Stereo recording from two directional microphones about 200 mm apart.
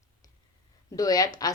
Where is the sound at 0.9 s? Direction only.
15° left (ahead or behind).